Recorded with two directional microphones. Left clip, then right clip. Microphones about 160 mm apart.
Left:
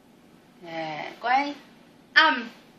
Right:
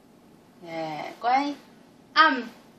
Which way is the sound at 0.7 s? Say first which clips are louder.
Even; centre (ahead or behind).